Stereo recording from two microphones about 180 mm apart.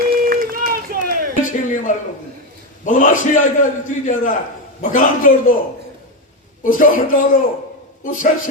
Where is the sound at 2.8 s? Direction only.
45° left (ahead or behind).